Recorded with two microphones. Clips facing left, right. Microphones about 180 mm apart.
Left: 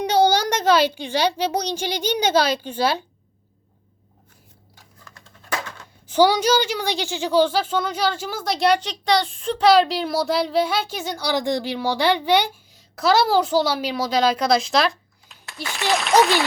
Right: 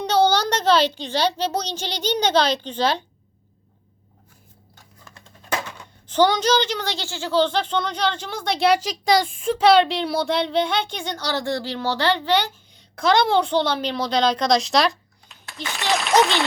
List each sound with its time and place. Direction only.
0.0 s a woman's voice: 10° left (ahead or behind)
5.4 s music: 15° right (ahead or behind)
6.1 s a woman's voice: 10° left (ahead or behind)